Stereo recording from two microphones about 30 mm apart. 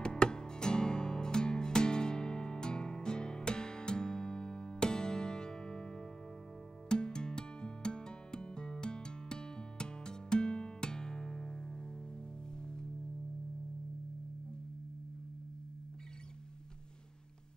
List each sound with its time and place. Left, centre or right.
0.0 s music: left